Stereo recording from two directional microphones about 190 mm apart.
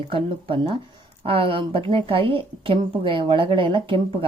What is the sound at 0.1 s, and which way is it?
Speech, 30° right (ahead or behind).